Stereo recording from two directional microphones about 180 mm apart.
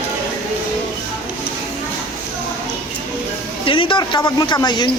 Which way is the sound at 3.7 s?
30° left (ahead or behind).